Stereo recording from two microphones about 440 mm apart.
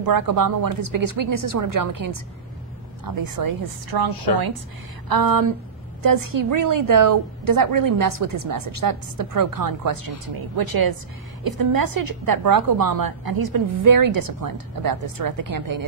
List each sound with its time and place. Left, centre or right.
0.0 s a woman's voice: right
3.2 s a woman's voice: right